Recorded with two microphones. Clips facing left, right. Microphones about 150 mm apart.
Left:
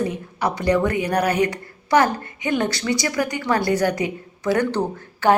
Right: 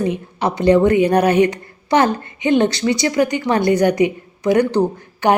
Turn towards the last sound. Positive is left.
turn(degrees=-15)  # may be behind; listen again after turning